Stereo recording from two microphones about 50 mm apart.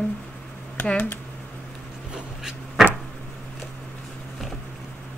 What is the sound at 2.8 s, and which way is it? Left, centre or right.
Vehicle, centre.